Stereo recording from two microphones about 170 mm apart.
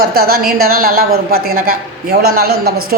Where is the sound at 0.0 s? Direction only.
60° right (ahead or behind).